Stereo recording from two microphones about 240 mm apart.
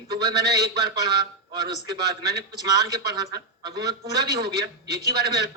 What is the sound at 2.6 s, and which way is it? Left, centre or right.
Speech, centre.